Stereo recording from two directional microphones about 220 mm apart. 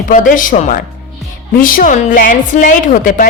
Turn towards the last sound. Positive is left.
turn(degrees=35)  # may be behind; listen again after turning